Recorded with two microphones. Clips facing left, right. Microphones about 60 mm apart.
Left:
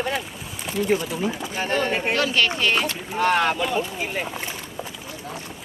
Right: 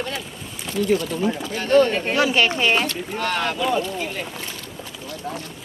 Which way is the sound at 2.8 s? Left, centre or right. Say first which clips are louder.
Left 3 dB; centre.